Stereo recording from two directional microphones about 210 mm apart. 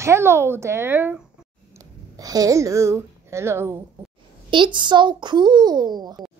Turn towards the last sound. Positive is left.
turn(degrees=-20)  # may be behind; listen again after turning